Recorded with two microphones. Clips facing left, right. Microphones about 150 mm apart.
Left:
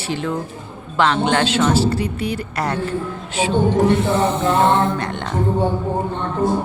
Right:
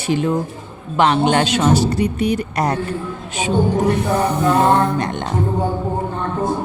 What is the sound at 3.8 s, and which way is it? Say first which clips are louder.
Music: left 1 dB; 25° left (ahead or behind).